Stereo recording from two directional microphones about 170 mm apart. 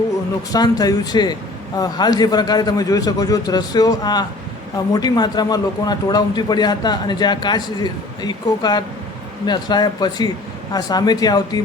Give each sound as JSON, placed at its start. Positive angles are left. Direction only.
{"t": 0.5, "sound": "a man's voice", "side_deg": 20}